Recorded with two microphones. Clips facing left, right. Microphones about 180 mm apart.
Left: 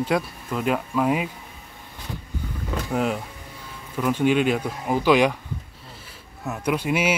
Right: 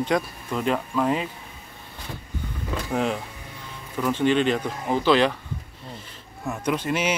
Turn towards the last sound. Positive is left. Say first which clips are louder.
# left 2 dB
turn(degrees=10)  # may be behind; listen again after turning